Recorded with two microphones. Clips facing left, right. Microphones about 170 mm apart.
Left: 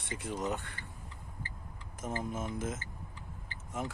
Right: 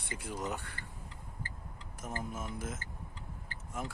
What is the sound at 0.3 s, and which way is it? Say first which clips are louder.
Speech: left 3 dB; centre (ahead or behind).